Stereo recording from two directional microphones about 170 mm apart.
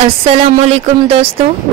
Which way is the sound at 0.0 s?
35° right (ahead or behind).